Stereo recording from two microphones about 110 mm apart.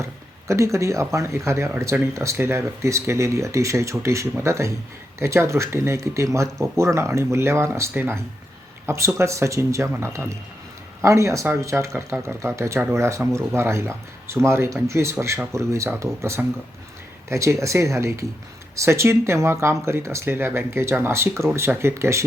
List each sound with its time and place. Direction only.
0.0 s speech: 25° right (ahead or behind)